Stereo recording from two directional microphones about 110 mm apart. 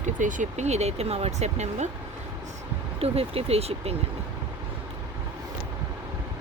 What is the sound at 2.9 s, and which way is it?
Speech, 60° right (ahead or behind).